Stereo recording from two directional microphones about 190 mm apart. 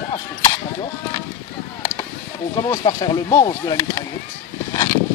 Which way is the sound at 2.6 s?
20° left (ahead or behind).